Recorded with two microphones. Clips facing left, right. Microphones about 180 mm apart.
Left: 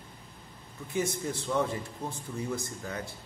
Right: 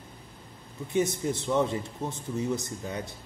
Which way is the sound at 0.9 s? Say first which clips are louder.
Right 4 dB; 20° right (ahead or behind).